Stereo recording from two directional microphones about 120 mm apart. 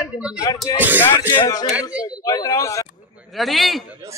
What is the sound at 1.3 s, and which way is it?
Speech, 35° left (ahead or behind).